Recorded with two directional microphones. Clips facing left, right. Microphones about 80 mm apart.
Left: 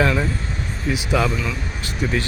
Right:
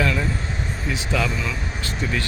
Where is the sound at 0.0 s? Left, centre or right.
Left.